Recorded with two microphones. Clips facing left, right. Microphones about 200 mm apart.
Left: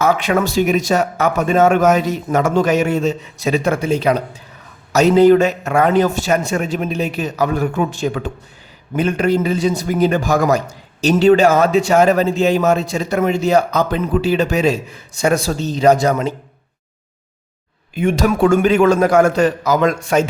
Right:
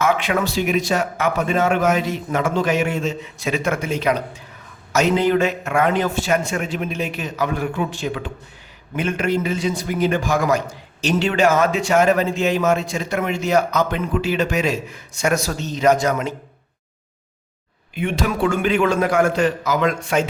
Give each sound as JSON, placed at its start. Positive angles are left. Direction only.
{"t": 0.0, "sound": "a man's voice", "side_deg": 40}
{"t": 17.9, "sound": "a man's voice", "side_deg": 45}